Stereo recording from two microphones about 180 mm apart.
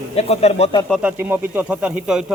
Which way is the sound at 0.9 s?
5° right (ahead or behind).